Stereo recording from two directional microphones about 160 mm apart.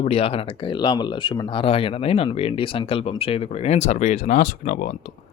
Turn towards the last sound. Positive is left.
turn(degrees=50)  # may be behind; listen again after turning